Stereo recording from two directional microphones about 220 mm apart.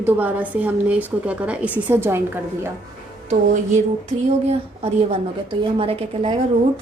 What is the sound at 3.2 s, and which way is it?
A woman's voice, 30° right (ahead or behind).